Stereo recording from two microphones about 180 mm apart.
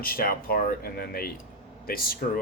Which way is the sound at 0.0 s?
55° left (ahead or behind).